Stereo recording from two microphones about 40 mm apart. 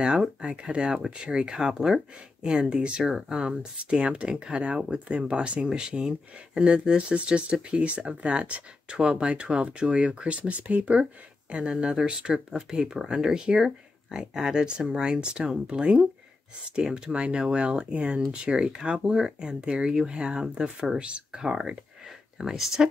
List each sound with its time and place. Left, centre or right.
0.2 s speech: right
21.4 s speech: centre